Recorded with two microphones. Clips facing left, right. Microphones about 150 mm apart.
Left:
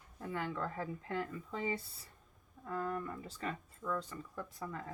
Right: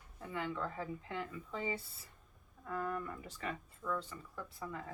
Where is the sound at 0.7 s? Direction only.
40° left (ahead or behind).